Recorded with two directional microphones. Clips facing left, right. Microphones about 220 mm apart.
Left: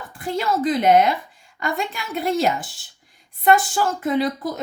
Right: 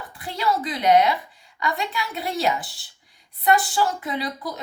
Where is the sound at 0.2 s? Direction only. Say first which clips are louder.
Left 3 dB; 50° left (ahead or behind).